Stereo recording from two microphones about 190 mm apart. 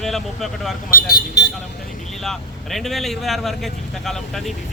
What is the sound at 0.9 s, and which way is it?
Speech, 55° left (ahead or behind).